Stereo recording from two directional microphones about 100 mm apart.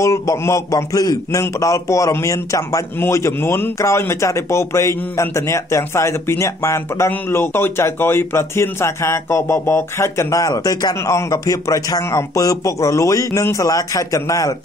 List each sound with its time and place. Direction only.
0.0 s a man's voice: 35° left (ahead or behind)